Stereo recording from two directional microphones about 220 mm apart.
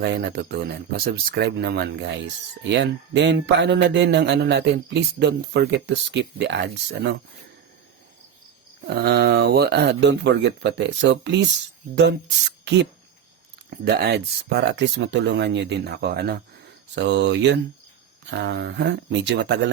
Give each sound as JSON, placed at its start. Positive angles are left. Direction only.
{"t": 0.0, "sound": "speech", "side_deg": -50}
{"t": 8.9, "sound": "speech", "side_deg": -50}
{"t": 12.6, "sound": "speech", "side_deg": -50}